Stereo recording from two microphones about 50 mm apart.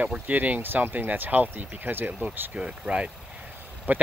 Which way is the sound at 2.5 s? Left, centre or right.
Right.